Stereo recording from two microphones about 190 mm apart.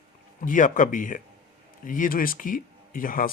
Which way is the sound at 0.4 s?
45° left (ahead or behind).